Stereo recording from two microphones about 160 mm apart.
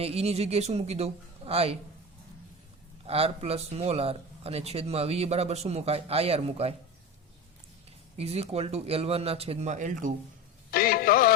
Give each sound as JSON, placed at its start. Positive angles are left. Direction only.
{"t": 0.0, "sound": "speech", "side_deg": -40}
{"t": 3.1, "sound": "speech", "side_deg": -40}
{"t": 8.2, "sound": "speech", "side_deg": -40}
{"t": 10.7, "sound": "music", "side_deg": 65}